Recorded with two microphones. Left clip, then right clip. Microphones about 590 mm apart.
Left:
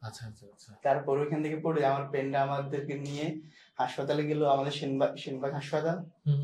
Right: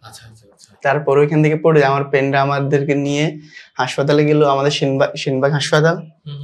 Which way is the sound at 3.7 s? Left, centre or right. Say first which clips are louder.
Right 15 dB; right.